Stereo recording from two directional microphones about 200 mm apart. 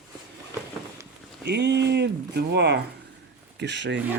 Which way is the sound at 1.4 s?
55° right (ahead or behind).